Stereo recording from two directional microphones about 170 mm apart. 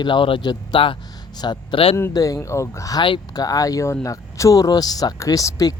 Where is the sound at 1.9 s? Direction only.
15° left (ahead or behind).